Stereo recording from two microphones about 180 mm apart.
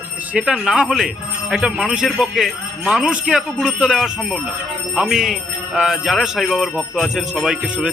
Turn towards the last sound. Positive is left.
turn(degrees=-5)  # may be behind; listen again after turning